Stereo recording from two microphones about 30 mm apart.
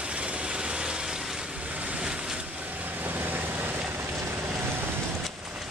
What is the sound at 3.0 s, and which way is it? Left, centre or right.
Vehicle, right.